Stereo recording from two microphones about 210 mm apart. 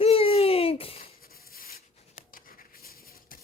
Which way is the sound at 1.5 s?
45° left (ahead or behind).